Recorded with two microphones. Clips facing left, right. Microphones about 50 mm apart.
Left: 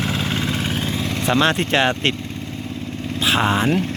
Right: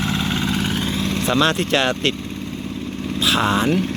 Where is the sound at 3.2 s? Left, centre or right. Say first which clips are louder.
Even; left.